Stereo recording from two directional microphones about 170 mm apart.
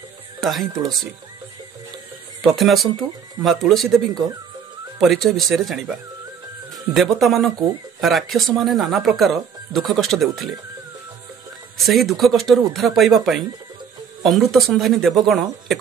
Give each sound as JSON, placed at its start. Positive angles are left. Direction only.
{"t": 0.4, "sound": "speech", "side_deg": 0}
{"t": 2.4, "sound": "speech", "side_deg": 0}
{"t": 4.1, "sound": "speech", "side_deg": -25}
{"t": 5.0, "sound": "speech", "side_deg": 0}
{"t": 11.8, "sound": "speech", "side_deg": 0}